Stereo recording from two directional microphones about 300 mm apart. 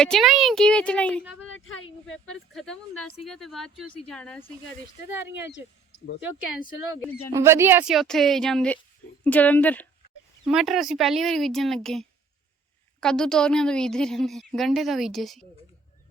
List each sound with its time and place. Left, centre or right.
0.0 s a woman's voice: centre
1.5 s a sound: left
2.1 s a woman's voice: centre
7.3 s a woman's voice: centre